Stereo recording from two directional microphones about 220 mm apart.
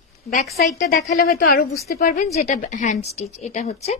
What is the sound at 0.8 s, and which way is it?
A woman's voice, 40° left (ahead or behind).